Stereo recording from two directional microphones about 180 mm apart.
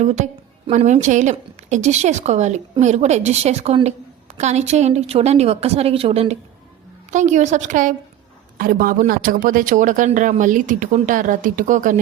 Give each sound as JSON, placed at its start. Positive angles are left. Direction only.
{"t": 0.0, "sound": "a woman's voice", "side_deg": -40}